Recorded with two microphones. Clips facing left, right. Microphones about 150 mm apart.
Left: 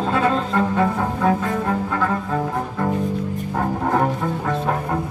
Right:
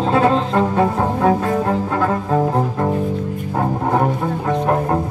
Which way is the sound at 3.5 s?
15° right (ahead or behind).